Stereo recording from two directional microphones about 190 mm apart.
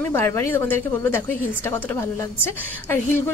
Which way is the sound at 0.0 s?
10° left (ahead or behind).